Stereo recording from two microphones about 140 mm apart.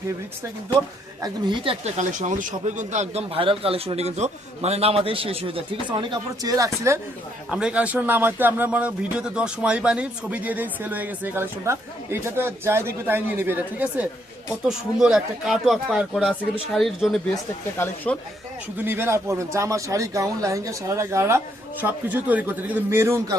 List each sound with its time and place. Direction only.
1.2 s speech: 35° right (ahead or behind)
1.8 s speech: 60° right (ahead or behind); by 7.0 s 20° right (ahead or behind)
7.5 s speech: 10° right (ahead or behind)
17.7 s speech: 10° left (ahead or behind)
18.8 s speech: 15° right (ahead or behind)